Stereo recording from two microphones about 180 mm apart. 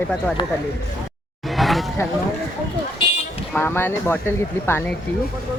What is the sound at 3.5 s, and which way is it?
Speech, 10° left (ahead or behind).